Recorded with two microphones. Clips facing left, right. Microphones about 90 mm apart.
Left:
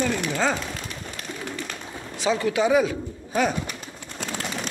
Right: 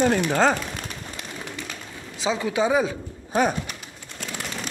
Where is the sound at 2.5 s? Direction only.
25° right (ahead or behind).